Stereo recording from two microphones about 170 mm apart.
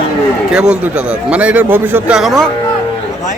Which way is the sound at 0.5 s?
5° right (ahead or behind).